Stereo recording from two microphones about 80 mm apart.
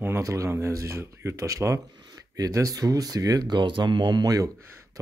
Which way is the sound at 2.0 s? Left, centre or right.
Right.